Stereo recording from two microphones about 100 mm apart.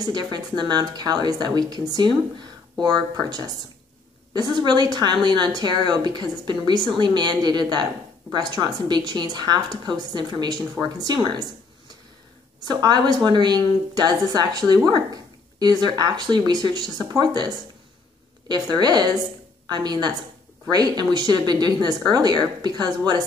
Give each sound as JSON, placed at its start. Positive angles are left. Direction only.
{"t": 0.0, "sound": "speech", "side_deg": -45}
{"t": 12.5, "sound": "a woman's voice", "side_deg": -40}
{"t": 18.5, "sound": "a woman's voice", "side_deg": -45}